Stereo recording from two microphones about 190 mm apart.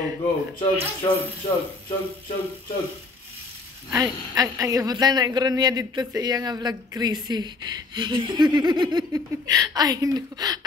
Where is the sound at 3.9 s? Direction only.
20° right (ahead or behind).